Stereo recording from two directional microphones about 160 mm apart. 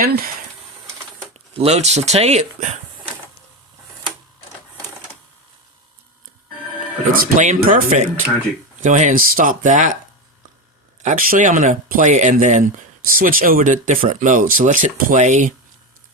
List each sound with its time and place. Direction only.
0.0 s speech: 70° right (ahead or behind)
1.5 s speech: 40° right (ahead or behind)
7.1 s speech: 55° right (ahead or behind)
11.0 s speech: 55° right (ahead or behind)